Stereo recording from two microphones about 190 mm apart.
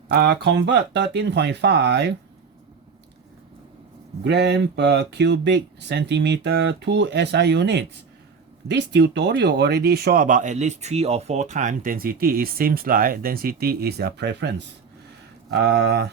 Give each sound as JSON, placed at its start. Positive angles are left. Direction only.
{"t": 0.1, "sound": "speech", "side_deg": -55}
{"t": 4.2, "sound": "speech", "side_deg": -65}